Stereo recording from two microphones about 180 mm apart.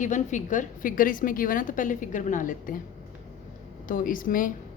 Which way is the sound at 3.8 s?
50° left (ahead or behind).